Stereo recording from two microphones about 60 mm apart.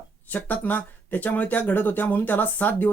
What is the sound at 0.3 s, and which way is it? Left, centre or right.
Speech, left.